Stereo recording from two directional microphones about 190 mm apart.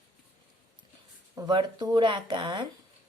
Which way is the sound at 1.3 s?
25° right (ahead or behind).